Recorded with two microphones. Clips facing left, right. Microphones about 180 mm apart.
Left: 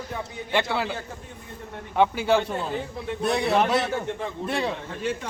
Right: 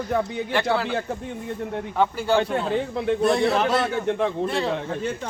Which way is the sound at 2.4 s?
70° right (ahead or behind).